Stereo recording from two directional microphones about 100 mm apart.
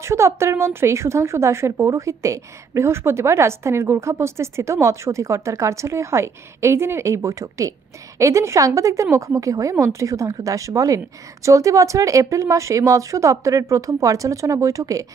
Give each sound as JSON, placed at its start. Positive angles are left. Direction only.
{"t": 0.0, "sound": "a woman's voice", "side_deg": -25}